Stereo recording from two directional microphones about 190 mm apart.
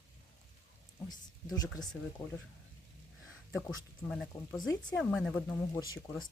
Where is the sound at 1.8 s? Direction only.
20° left (ahead or behind).